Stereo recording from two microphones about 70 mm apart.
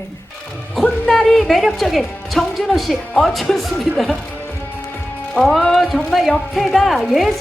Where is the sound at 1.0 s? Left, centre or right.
Centre.